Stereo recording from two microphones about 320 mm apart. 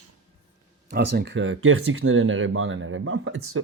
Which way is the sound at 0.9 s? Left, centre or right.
Right.